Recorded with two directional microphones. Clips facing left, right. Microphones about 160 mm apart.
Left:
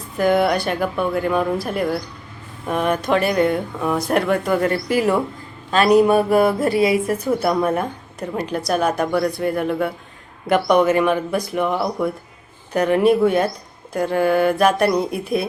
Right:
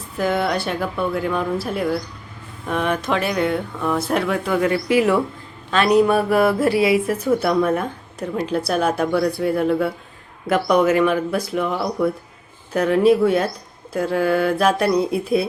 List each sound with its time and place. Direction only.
0.2 s speech: 5° left (ahead or behind)
5.7 s speech: 40° left (ahead or behind)
6.3 s a woman's voice: 5° right (ahead or behind)